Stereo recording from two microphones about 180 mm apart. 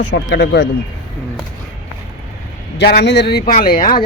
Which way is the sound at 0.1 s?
75° left (ahead or behind).